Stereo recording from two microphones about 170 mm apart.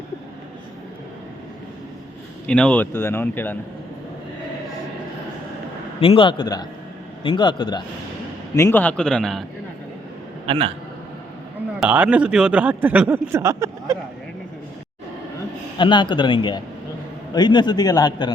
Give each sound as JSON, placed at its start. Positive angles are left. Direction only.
{"t": 2.5, "sound": "speech", "side_deg": 5}
{"t": 6.0, "sound": "a man's voice", "side_deg": 30}
{"t": 8.5, "sound": "speech", "side_deg": 15}
{"t": 10.4, "sound": "a man's voice", "side_deg": -35}
{"t": 11.8, "sound": "speech", "side_deg": -10}
{"t": 15.8, "sound": "a man's voice", "side_deg": 25}